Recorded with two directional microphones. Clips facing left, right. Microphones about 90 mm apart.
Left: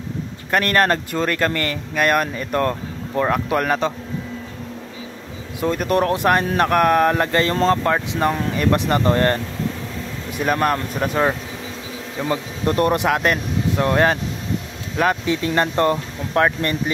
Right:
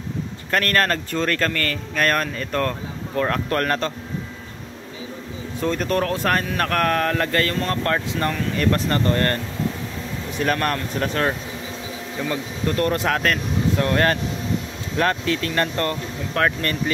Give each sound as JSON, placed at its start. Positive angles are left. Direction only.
{"t": 0.5, "sound": "speech", "side_deg": 15}
{"t": 5.6, "sound": "speech", "side_deg": 10}
{"t": 10.4, "sound": "speech", "side_deg": 5}
{"t": 12.3, "sound": "speech", "side_deg": 20}